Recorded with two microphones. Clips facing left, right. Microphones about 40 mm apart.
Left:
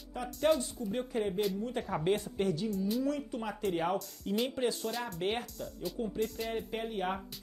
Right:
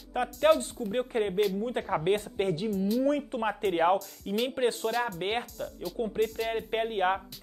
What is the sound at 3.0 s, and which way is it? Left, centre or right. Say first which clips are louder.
Speech: right 7 dB; right.